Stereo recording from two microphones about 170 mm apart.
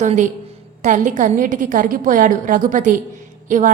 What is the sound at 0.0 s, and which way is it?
A woman's voice, 45° right (ahead or behind).